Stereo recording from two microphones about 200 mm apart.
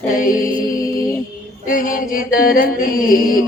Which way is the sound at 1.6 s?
45° left (ahead or behind).